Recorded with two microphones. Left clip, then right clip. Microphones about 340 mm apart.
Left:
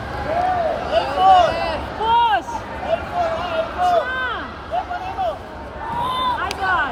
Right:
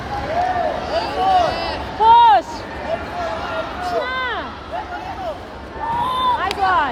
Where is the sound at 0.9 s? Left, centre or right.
Centre.